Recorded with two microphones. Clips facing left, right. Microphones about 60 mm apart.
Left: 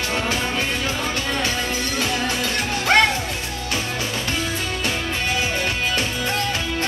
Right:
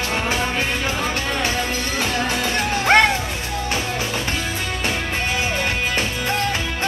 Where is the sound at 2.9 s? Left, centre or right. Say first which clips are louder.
Right 2 dB; right.